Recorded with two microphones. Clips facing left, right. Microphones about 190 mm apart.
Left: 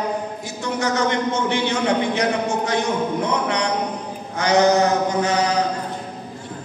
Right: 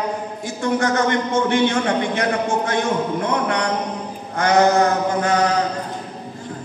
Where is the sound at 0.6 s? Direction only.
55° right (ahead or behind).